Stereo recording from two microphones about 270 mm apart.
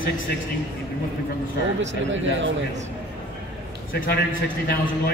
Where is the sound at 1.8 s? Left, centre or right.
Right.